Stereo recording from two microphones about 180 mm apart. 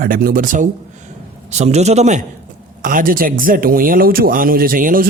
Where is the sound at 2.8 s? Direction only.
50° right (ahead or behind).